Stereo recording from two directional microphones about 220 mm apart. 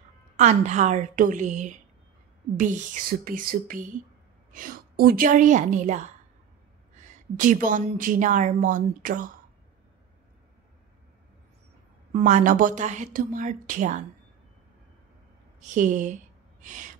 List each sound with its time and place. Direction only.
0.4 s a woman's voice: 30° right (ahead or behind)
12.1 s a woman's voice: 35° right (ahead or behind)
15.6 s a woman's voice: 35° right (ahead or behind)